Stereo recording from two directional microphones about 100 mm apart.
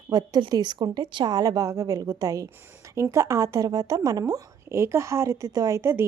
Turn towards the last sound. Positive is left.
turn(degrees=-25)  # may be behind; listen again after turning